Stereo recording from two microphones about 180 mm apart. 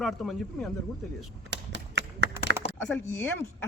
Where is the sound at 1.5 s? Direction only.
75° right (ahead or behind).